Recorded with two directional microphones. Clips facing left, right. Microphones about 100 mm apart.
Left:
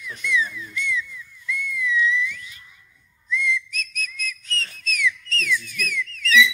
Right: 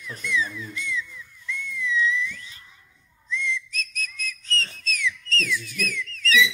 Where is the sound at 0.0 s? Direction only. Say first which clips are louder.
Left 2 dB; 35° right (ahead or behind).